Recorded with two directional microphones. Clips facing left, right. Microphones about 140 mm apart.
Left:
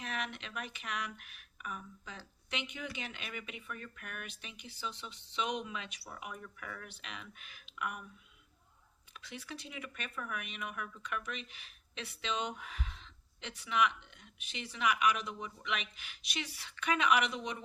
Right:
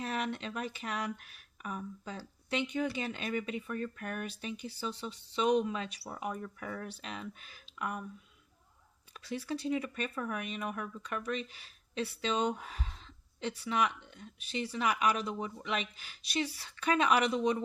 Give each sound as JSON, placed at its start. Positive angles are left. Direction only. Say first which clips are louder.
{"t": 0.0, "sound": "speech", "louder": "right 6 dB", "side_deg": -35}
{"t": 9.1, "sound": "speech", "louder": "right 9 dB", "side_deg": -35}